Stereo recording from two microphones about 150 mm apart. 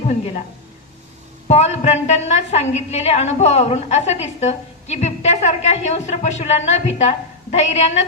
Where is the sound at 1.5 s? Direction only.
45° left (ahead or behind).